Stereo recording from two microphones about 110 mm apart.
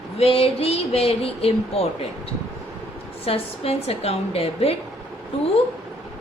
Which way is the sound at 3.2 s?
65° left (ahead or behind).